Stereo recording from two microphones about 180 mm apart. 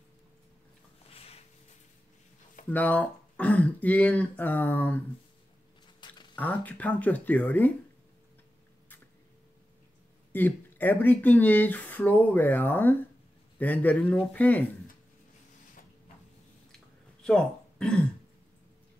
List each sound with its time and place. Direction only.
1.1 s a sound: 35° left (ahead or behind)
2.7 s speech: 10° left (ahead or behind)
5.9 s a sound: 25° left (ahead or behind)
6.3 s speech: 10° left (ahead or behind)
10.3 s speech: 10° left (ahead or behind)
17.2 s speech: 5° left (ahead or behind)